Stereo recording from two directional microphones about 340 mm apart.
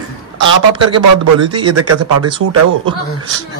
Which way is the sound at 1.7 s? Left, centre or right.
Right.